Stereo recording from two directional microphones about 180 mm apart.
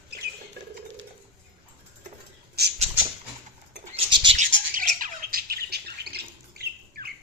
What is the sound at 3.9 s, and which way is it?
Bird, 30° right (ahead or behind).